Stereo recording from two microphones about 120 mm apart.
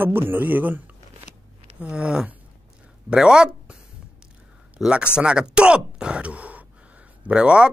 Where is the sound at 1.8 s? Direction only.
10° right (ahead or behind).